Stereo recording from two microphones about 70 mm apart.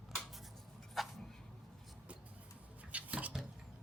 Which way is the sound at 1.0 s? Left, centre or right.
Centre.